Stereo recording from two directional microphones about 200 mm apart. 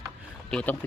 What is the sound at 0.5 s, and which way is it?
Speech, 5° left (ahead or behind).